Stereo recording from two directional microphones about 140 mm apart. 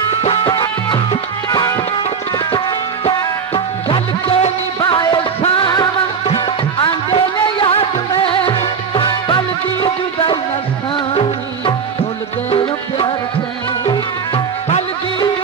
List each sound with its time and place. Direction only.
0.5 s music: 30° left (ahead or behind)
3.1 s music: 40° left (ahead or behind)
12.4 s music: 40° left (ahead or behind)